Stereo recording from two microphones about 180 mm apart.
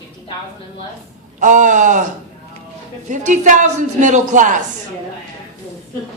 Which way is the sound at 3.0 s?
40° right (ahead or behind).